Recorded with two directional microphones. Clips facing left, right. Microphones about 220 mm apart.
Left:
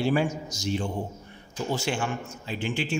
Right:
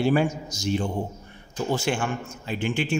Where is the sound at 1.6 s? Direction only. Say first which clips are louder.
Right 3 dB; 50° right (ahead or behind).